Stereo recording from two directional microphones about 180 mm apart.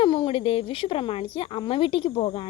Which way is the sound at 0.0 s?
30° left (ahead or behind).